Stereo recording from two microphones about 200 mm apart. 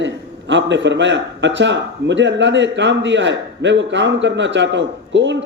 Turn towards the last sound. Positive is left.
turn(degrees=-65)  # may be behind; listen again after turning